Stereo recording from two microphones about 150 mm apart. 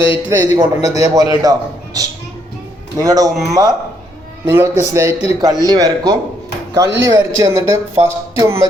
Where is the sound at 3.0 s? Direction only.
25° right (ahead or behind).